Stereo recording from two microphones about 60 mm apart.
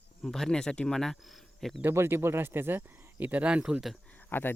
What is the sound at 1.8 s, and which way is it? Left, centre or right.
Speech, right.